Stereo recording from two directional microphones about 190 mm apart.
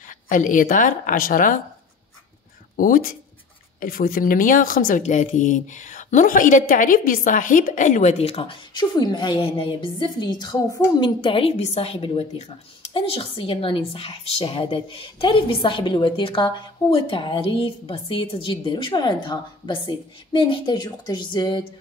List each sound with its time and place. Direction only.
0.3 s a woman's voice: 45° left (ahead or behind)
2.7 s a woman's voice: 50° left (ahead or behind); by 21.6 s 25° left (ahead or behind)